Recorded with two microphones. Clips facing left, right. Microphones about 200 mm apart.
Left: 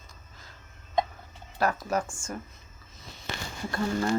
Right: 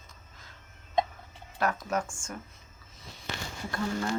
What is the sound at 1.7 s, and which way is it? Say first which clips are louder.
Speech: left 2 dB; 5° left (ahead or behind).